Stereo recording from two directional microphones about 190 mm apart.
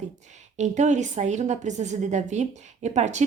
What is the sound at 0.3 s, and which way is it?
A woman's voice, 35° right (ahead or behind).